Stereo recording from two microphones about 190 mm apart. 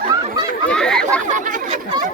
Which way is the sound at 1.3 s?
40° right (ahead or behind).